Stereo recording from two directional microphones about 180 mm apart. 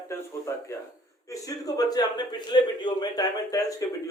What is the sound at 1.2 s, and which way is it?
A man's voice, 20° left (ahead or behind).